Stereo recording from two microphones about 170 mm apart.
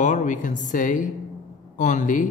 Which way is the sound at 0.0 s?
45° left (ahead or behind).